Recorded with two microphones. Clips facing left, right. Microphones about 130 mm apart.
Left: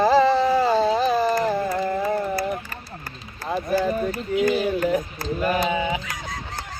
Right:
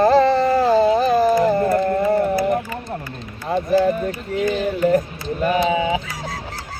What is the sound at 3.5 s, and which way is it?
Speech, centre (ahead or behind).